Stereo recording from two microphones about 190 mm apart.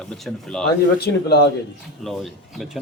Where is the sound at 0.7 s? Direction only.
55° left (ahead or behind).